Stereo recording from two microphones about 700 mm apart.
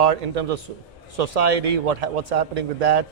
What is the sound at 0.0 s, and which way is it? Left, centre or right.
Speech, right.